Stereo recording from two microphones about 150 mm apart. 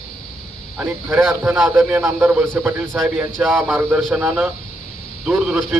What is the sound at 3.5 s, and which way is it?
A man's voice, 10° right (ahead or behind).